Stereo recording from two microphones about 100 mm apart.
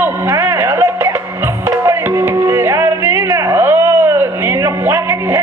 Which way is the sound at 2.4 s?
25° right (ahead or behind).